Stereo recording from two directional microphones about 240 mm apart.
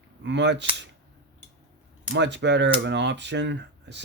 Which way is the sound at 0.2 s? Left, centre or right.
Right.